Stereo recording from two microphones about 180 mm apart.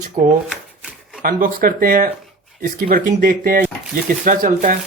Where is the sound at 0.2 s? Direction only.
50° right (ahead or behind).